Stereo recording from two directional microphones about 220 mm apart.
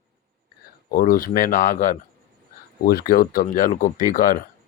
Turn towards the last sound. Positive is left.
turn(degrees=40)  # may be behind; listen again after turning